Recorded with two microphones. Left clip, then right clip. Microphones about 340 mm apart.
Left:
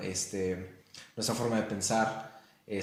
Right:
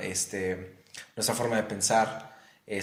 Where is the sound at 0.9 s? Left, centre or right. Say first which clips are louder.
Right 4 dB; right.